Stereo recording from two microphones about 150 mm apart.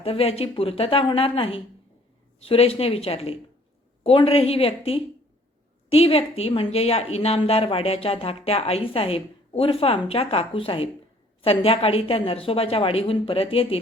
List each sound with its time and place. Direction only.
0.0 s a woman's voice: 40° left (ahead or behind)